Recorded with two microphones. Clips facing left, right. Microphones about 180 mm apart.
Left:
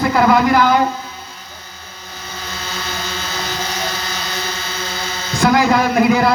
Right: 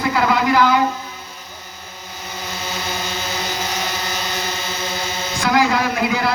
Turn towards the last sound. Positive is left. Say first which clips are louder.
# left 6 dB
turn(degrees=50)  # may be behind; listen again after turning